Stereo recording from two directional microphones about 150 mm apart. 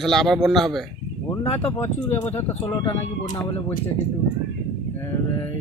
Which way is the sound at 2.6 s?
35° left (ahead or behind).